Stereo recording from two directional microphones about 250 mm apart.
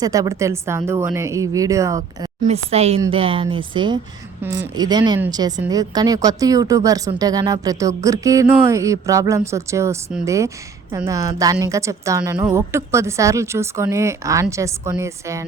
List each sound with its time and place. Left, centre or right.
0.0 s speech: centre
2.4 s speech: right